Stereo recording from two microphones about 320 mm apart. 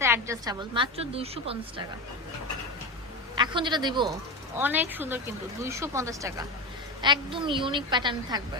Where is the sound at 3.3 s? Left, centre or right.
Centre.